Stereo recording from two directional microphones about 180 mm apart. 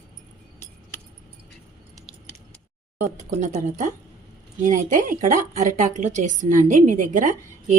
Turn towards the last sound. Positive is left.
turn(degrees=-45)  # may be behind; listen again after turning